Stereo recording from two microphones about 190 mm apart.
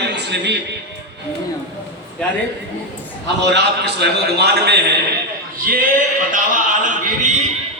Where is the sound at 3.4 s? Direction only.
65° right (ahead or behind).